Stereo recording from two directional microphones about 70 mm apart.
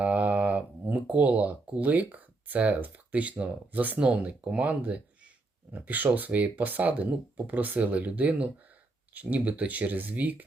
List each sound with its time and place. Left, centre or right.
0.0 s speech: right